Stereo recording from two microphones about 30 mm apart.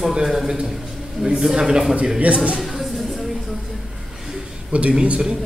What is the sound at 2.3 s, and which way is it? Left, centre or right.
Speech, right.